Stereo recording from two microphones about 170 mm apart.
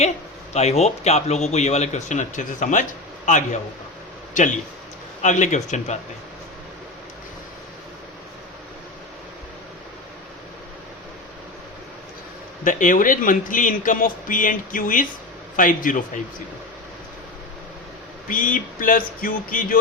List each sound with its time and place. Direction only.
0.5 s speech: 40° left (ahead or behind)
12.6 s speech: 50° left (ahead or behind)
18.3 s speech: 50° left (ahead or behind)